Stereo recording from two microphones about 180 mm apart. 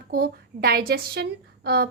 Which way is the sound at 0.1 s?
55° right (ahead or behind).